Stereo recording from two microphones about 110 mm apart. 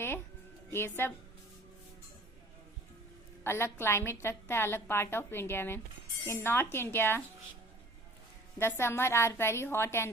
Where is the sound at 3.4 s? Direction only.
20° left (ahead or behind).